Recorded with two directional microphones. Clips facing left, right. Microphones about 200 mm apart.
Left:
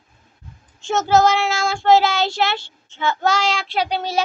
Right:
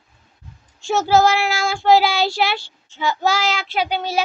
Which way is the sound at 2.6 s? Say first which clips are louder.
Even; 25° left (ahead or behind).